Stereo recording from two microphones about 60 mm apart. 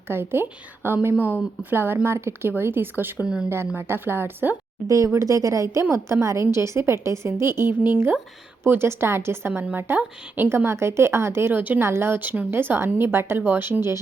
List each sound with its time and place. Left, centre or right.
0.1 s a woman's voice: right
4.9 s speech: right
5.9 s a woman's voice: right
11.6 s speech: right
11.9 s a woman's voice: right